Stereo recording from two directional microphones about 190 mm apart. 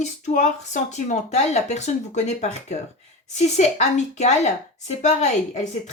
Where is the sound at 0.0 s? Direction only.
40° left (ahead or behind).